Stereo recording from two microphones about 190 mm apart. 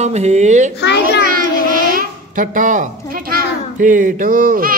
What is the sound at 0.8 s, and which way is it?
Speech, 65° left (ahead or behind).